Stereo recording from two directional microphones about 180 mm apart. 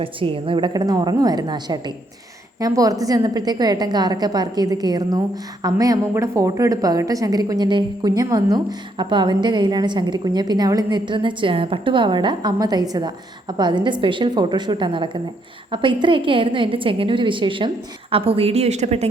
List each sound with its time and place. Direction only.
0.0 s a woman's voice: 30° right (ahead or behind)